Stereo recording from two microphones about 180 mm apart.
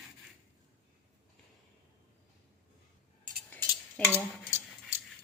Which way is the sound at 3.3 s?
45° right (ahead or behind).